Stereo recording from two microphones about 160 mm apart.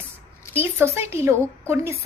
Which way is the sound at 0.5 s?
15° right (ahead or behind).